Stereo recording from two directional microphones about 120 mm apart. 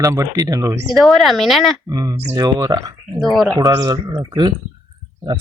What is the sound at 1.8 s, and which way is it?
A man's voice, 30° right (ahead or behind).